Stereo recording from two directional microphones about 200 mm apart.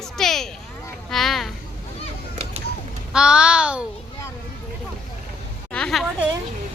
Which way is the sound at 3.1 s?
5° right (ahead or behind).